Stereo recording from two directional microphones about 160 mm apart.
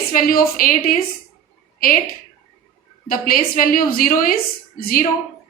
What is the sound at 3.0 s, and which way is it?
A woman's voice, 60° left (ahead or behind).